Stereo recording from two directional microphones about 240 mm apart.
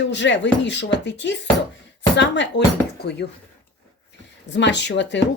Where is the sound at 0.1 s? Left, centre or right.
Left.